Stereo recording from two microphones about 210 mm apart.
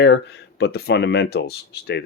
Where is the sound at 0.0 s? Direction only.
55° left (ahead or behind).